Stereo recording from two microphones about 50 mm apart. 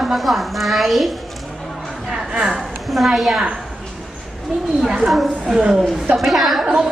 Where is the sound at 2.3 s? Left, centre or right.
Centre.